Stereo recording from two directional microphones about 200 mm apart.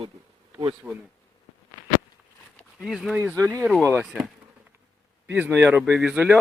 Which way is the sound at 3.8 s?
15° right (ahead or behind).